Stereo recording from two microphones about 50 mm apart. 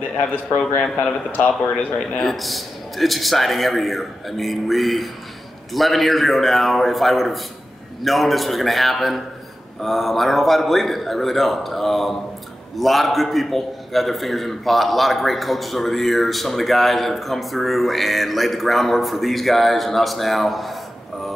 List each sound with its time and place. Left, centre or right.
0.9 s speech: left
2.1 s a man's voice: centre